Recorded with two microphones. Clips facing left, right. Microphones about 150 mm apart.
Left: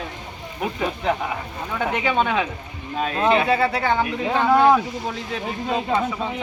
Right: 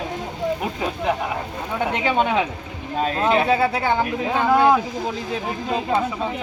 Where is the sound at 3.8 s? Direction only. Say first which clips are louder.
Even; 10° right (ahead or behind).